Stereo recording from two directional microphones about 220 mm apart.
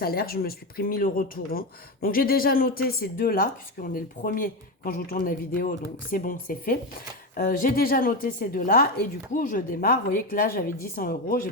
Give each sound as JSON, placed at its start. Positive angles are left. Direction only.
{"t": 0.0, "sound": "speech", "side_deg": 45}